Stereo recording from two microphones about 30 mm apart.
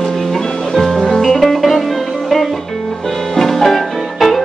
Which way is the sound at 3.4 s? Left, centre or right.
Centre.